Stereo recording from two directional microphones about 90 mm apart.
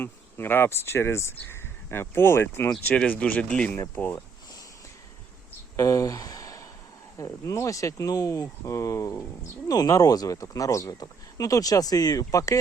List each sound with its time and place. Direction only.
0.0 s speech: 25° left (ahead or behind)
2.8 s speech: 15° left (ahead or behind)
5.7 s a sound: 35° left (ahead or behind)
7.2 s speech: 35° left (ahead or behind)